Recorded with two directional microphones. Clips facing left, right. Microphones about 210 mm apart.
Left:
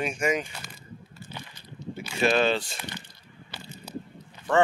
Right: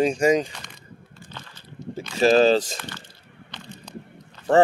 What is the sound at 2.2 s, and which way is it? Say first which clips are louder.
Speech: right 7 dB; 35° right (ahead or behind).